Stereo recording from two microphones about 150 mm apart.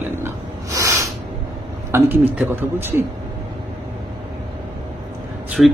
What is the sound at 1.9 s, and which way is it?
A man's voice, 15° right (ahead or behind).